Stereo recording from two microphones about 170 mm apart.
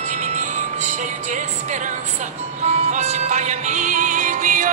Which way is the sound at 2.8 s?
40° right (ahead or behind).